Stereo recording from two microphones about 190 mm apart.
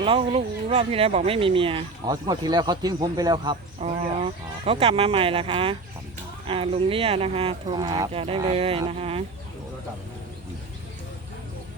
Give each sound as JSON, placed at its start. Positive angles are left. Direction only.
{"t": 0.0, "sound": "speech", "side_deg": -30}
{"t": 8.1, "sound": "speech", "side_deg": -30}